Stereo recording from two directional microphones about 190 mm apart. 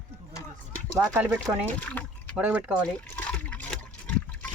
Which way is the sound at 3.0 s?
10° left (ahead or behind).